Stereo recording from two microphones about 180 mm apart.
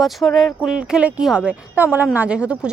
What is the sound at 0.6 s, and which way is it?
A woman's voice, 5° right (ahead or behind).